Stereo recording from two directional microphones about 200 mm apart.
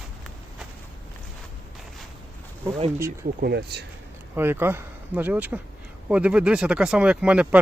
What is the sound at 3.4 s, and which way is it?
Speech, 55° right (ahead or behind).